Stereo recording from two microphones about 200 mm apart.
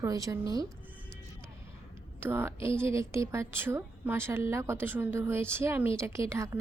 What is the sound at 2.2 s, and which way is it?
A woman's voice, 10° right (ahead or behind).